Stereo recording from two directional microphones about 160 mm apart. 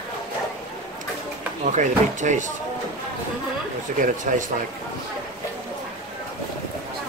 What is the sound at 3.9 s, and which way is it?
Speech, 50° right (ahead or behind).